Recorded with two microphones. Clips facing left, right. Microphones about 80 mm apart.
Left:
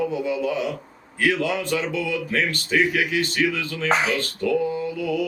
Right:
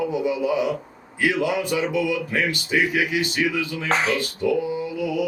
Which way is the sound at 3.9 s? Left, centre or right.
Centre.